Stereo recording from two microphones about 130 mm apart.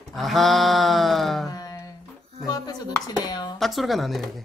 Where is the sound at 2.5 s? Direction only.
30° left (ahead or behind).